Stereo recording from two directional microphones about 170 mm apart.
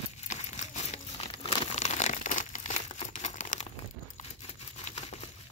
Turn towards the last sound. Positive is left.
turn(degrees=40)  # may be behind; listen again after turning